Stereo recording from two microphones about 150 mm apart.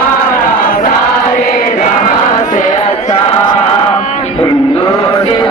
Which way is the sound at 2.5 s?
55° left (ahead or behind).